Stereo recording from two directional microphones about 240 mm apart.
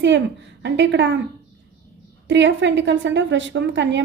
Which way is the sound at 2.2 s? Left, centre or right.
Right.